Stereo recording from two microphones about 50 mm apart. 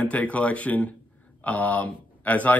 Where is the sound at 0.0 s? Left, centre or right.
Left.